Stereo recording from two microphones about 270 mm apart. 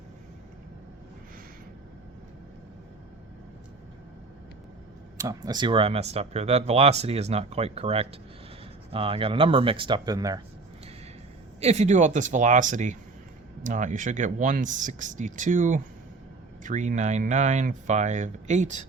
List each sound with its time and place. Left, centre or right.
5.1 s speech: centre
11.6 s speech: right